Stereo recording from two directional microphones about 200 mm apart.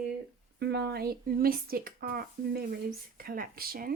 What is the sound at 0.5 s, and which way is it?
Speech, 55° right (ahead or behind).